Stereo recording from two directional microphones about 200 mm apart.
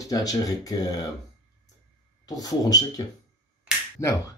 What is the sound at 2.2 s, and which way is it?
Speech, 20° left (ahead or behind).